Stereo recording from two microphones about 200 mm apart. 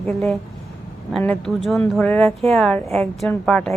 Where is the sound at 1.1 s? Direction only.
5° left (ahead or behind).